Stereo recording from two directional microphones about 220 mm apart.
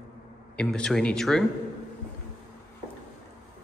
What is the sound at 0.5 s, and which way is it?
Speech, 5° left (ahead or behind).